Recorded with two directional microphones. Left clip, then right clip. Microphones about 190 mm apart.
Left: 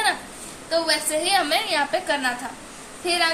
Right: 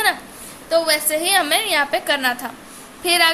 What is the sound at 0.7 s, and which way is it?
A woman's voice, 45° right (ahead or behind).